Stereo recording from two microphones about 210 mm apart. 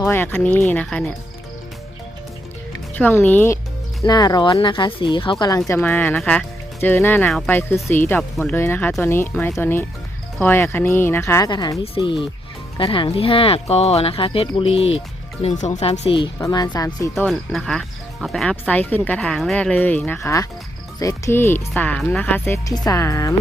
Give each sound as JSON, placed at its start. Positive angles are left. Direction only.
{"t": 0.0, "sound": "speech", "side_deg": 10}
{"t": 2.9, "sound": "speech", "side_deg": 10}
{"t": 17.2, "sound": "speech", "side_deg": 0}